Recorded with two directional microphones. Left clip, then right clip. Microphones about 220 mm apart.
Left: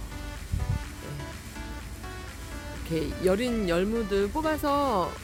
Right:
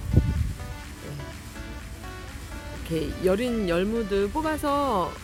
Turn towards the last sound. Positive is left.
turn(degrees=0)  # may be behind; listen again after turning